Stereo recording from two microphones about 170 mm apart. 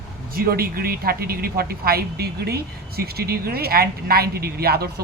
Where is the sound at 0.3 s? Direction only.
60° right (ahead or behind).